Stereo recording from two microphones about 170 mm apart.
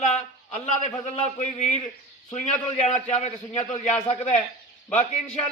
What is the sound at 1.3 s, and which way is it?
A man's voice, 45° left (ahead or behind).